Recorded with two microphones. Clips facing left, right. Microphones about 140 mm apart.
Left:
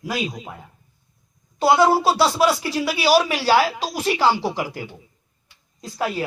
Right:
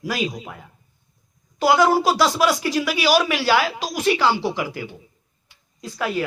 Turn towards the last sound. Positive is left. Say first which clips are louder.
# even
turn(degrees=35)  # may be behind; listen again after turning